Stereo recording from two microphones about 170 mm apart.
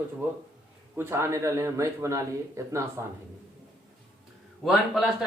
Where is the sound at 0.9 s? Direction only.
15° right (ahead or behind).